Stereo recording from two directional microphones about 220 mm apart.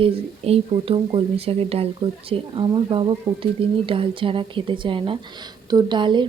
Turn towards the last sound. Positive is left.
turn(degrees=-20)  # may be behind; listen again after turning